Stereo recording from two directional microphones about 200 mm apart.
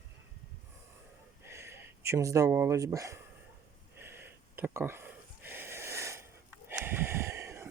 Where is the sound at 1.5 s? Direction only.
10° right (ahead or behind).